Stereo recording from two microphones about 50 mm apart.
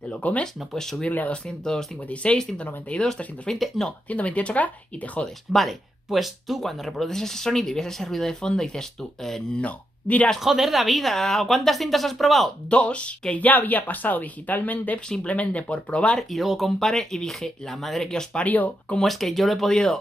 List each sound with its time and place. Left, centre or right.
0.1 s speech: left
0.4 s speech: centre
2.6 s speech: left
4.1 s speech: left
5.5 s speech: centre
9.6 s speech: left
10.4 s speech: centre
12.6 s speech: left
16.2 s speech: centre
18.4 s speech: left
18.9 s speech: centre